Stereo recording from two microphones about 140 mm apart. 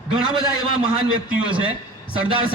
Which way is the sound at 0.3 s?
30° right (ahead or behind).